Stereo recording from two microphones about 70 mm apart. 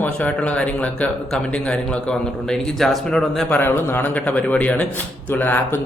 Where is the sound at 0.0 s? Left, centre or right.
Centre.